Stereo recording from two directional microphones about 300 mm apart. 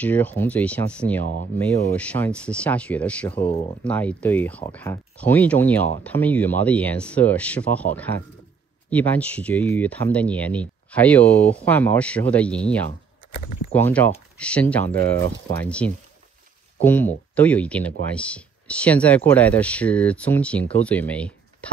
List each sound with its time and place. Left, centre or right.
0.0 s speech: centre
13.3 s speech: left
13.7 s speech: centre